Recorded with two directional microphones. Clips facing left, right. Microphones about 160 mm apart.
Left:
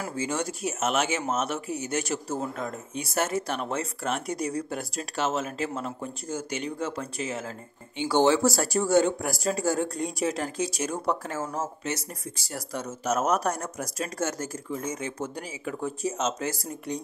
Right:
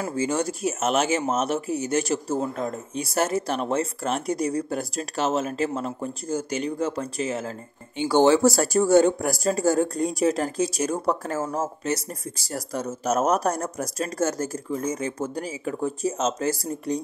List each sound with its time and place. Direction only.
0.1 s speech: 35° right (ahead or behind)